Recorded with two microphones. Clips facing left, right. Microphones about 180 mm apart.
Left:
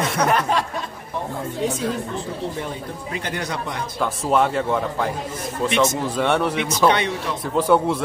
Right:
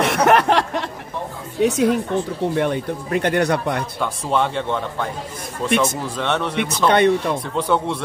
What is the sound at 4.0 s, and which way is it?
Speech, 5° left (ahead or behind).